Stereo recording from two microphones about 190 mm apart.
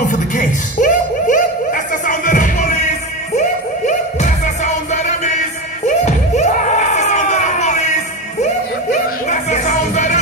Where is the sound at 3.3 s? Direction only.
35° left (ahead or behind).